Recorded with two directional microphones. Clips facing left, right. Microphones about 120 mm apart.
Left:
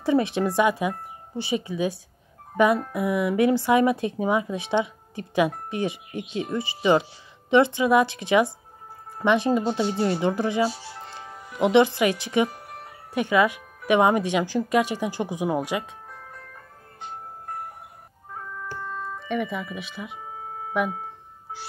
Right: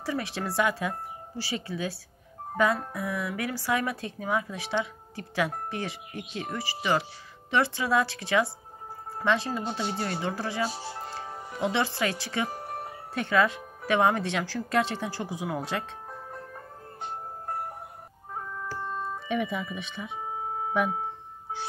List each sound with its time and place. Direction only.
0.0 s speech: 20° left (ahead or behind)
11.1 s music: 35° right (ahead or behind)
11.5 s speech: 15° left (ahead or behind)
12.4 s music: 40° right (ahead or behind)
13.1 s speech: 15° left (ahead or behind)
18.8 s music: 25° right (ahead or behind)
19.2 s speech: centre (ahead or behind)